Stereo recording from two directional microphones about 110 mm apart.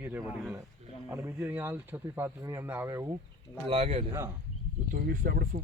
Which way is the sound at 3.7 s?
65° right (ahead or behind).